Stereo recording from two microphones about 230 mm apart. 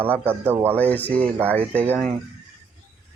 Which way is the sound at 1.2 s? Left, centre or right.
Centre.